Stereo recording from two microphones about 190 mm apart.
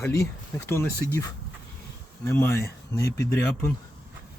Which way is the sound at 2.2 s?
15° left (ahead or behind).